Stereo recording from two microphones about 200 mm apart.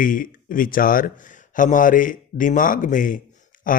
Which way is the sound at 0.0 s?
45° left (ahead or behind).